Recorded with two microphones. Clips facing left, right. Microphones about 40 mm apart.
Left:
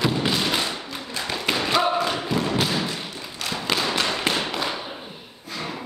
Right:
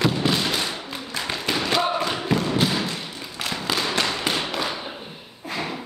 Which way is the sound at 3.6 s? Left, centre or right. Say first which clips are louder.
Left 1 dB; centre.